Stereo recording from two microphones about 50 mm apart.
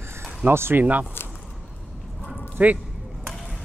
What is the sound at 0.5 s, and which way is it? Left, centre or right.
Speech, right.